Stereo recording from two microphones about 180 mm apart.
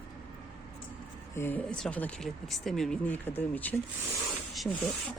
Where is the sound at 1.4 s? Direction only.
10° left (ahead or behind).